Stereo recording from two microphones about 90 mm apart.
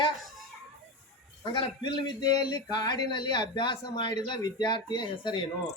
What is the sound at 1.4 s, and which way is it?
Speech, 60° left (ahead or behind).